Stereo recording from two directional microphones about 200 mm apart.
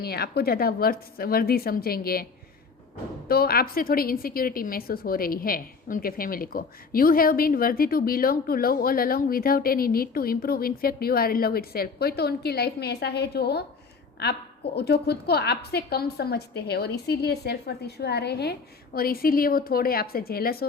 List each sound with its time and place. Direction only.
0.0 s a woman's voice: 50° left (ahead or behind)
3.2 s a woman's voice: 50° left (ahead or behind)